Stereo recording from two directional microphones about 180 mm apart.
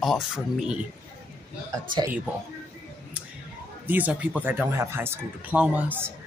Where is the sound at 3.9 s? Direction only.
10° right (ahead or behind).